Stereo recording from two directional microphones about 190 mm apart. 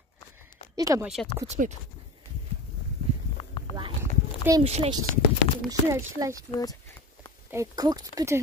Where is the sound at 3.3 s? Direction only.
30° left (ahead or behind).